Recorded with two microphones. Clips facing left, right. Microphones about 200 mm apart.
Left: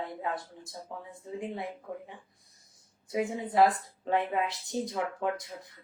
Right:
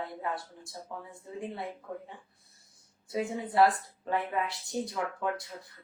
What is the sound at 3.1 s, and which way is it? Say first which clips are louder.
Speech: left 1 dB; 20° left (ahead or behind).